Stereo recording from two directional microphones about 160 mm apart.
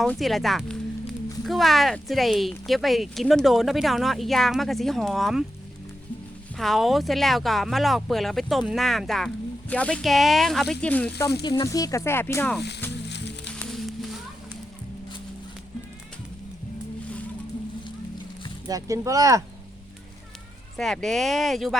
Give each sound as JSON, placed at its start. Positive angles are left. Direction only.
{"t": 0.0, "sound": "speech", "side_deg": 0}
{"t": 6.6, "sound": "speech", "side_deg": 0}
{"t": 11.4, "sound": "speech", "side_deg": 25}
{"t": 13.1, "sound": "music", "side_deg": 90}
{"t": 13.5, "sound": "music", "side_deg": 5}
{"t": 18.7, "sound": "speech", "side_deg": -20}
{"t": 20.7, "sound": "speech", "side_deg": 0}